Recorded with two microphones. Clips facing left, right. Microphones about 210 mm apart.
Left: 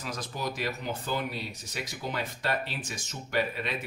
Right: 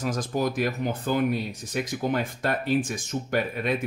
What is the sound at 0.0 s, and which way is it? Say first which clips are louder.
Speech: right 9 dB; 45° right (ahead or behind).